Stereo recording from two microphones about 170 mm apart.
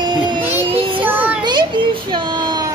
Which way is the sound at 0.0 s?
25° right (ahead or behind).